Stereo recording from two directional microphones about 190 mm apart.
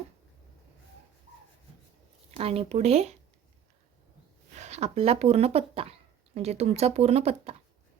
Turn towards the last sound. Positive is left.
turn(degrees=-35)  # may be behind; listen again after turning